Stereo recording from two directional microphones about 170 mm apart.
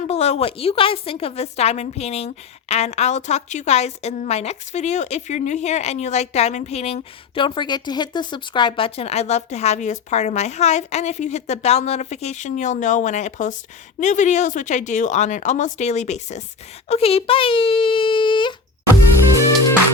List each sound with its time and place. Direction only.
0.1 s a woman's voice: 40° left (ahead or behind)